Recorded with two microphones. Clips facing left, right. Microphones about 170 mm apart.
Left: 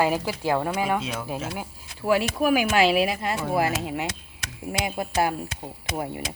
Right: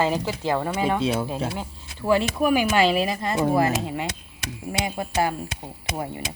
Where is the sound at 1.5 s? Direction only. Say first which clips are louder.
Right 2 dB; 10° left (ahead or behind).